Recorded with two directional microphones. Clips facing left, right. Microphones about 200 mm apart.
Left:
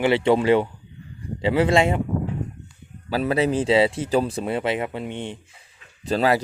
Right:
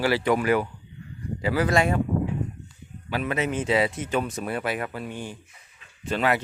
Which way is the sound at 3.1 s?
35° left (ahead or behind).